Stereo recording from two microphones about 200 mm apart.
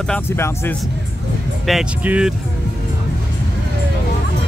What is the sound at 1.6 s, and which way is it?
Speech, 5° right (ahead or behind).